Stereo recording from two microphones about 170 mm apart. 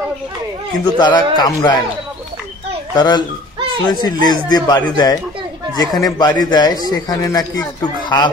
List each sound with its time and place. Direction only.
0.9 s a man's voice: 25° left (ahead or behind)
2.9 s a man's voice: 25° left (ahead or behind)